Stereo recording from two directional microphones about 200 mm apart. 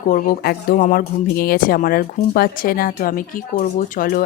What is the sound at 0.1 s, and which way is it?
Speech, 40° left (ahead or behind).